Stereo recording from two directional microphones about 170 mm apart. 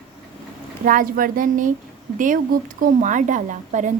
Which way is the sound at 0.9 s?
55° right (ahead or behind).